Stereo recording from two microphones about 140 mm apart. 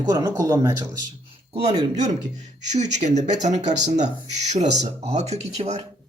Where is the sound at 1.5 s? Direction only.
45° right (ahead or behind).